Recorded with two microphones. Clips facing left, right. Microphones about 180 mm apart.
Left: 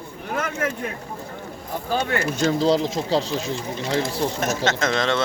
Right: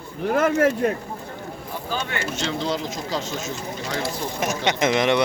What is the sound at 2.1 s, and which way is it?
Speech, 40° left (ahead or behind).